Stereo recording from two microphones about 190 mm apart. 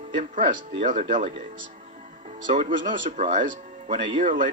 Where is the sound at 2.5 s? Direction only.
30° right (ahead or behind).